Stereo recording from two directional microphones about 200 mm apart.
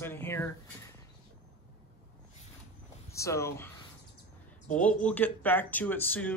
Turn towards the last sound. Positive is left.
turn(degrees=10)  # may be behind; listen again after turning